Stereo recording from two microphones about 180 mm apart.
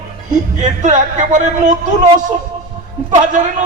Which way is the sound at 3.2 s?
45° right (ahead or behind).